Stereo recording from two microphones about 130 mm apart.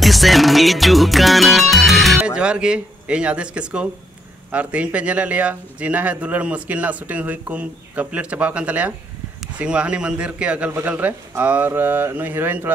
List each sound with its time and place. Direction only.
0.0 s music: centre (ahead or behind)
4.5 s a man's voice: 10° right (ahead or behind)